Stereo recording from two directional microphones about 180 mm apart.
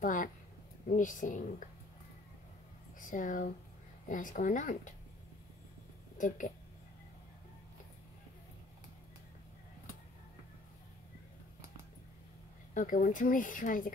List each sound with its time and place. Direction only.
0.0 s a woman's voice: 45° left (ahead or behind)
3.0 s speech: 45° left (ahead or behind)
6.1 s speech: 45° left (ahead or behind)
12.7 s speech: 50° left (ahead or behind)